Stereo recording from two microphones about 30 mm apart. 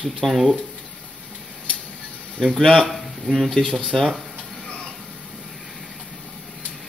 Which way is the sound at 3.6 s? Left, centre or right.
Left.